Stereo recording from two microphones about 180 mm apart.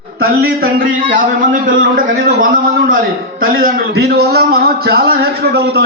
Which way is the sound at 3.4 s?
55° right (ahead or behind).